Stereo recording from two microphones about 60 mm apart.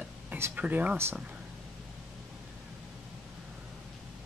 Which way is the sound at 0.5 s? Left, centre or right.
Right.